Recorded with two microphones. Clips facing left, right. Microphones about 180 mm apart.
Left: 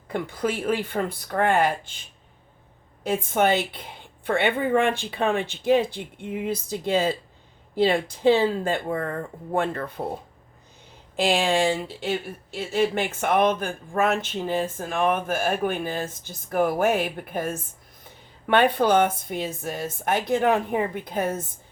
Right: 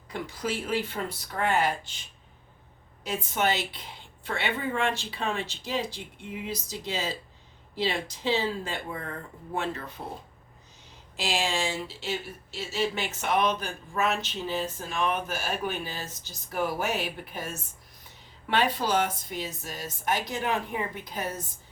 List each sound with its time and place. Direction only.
0.1 s speech: 55° left (ahead or behind)
3.0 s a woman's voice: 55° left (ahead or behind)
11.2 s a woman's voice: 55° left (ahead or behind)